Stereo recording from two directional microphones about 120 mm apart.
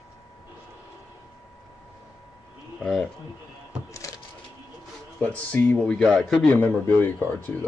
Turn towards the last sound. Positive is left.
turn(degrees=15)  # may be behind; listen again after turning